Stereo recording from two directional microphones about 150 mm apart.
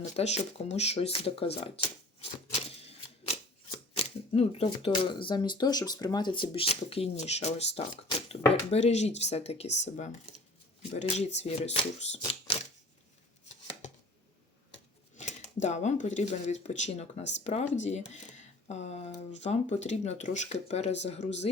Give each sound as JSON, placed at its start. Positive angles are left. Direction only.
{"t": 0.2, "sound": "speech", "side_deg": 45}
{"t": 2.5, "sound": "typewriter", "side_deg": 40}
{"t": 3.9, "sound": "speech", "side_deg": 40}
{"t": 12.3, "sound": "a sound", "side_deg": 40}
{"t": 15.2, "sound": "speech", "side_deg": 50}